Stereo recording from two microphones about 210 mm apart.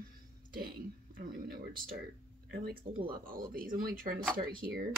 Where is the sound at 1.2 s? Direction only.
45° right (ahead or behind).